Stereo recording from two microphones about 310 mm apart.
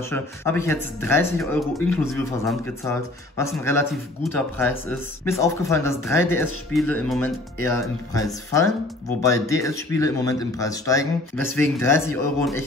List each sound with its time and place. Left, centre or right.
0.1 s speech: centre